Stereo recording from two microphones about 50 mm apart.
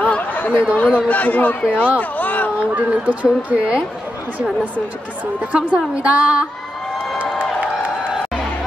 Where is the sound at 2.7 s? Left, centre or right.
Right.